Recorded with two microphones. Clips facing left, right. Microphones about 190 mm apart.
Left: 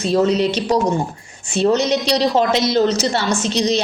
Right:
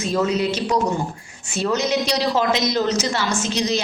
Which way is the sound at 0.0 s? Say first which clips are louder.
Left 5 dB; 35° left (ahead or behind).